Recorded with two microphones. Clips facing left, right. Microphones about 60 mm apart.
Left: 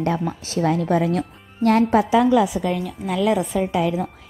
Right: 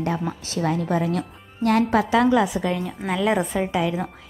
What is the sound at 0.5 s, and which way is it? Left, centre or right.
Speech, left.